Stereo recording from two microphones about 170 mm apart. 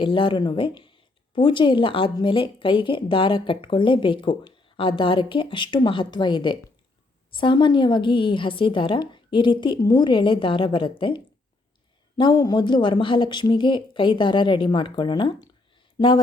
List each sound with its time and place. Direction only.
0.0 s speech: 30° left (ahead or behind)